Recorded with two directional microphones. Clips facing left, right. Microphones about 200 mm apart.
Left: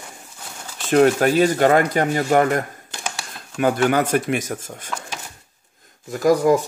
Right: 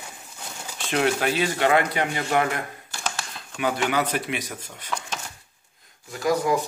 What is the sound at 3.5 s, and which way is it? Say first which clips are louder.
Speech: left 6 dB; 45° left (ahead or behind).